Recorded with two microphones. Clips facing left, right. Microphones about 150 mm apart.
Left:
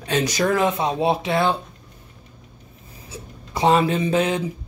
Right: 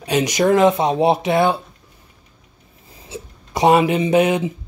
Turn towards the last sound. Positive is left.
turn(degrees=-15)  # may be behind; listen again after turning